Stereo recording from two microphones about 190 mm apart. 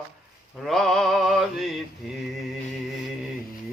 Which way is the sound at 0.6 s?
Centre (ahead or behind).